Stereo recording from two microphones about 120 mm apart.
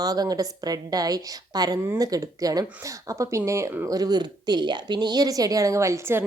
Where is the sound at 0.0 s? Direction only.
30° right (ahead or behind).